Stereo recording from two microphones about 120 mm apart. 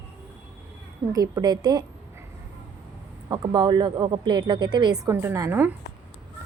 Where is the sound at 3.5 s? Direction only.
40° right (ahead or behind).